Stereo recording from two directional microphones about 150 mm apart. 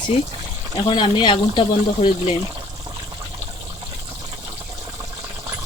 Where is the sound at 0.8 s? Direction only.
30° left (ahead or behind).